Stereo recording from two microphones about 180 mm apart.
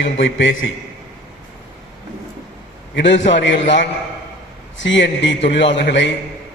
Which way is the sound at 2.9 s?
80° left.